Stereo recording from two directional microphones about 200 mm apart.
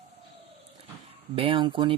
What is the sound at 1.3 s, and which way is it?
Speech, 25° right (ahead or behind).